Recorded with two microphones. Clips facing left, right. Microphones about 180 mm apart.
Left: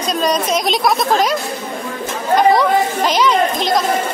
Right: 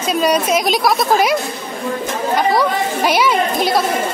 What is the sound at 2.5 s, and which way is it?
Speech, 10° right (ahead or behind).